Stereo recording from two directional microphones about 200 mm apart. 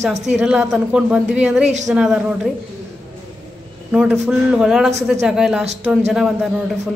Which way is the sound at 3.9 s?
5° right (ahead or behind).